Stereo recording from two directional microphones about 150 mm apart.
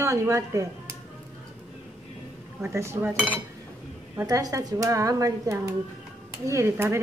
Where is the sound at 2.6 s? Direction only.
15° right (ahead or behind).